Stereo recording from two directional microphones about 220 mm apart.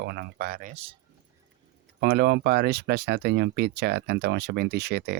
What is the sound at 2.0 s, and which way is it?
Speech, 45° right (ahead or behind).